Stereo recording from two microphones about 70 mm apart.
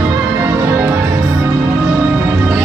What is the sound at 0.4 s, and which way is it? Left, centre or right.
Music, right.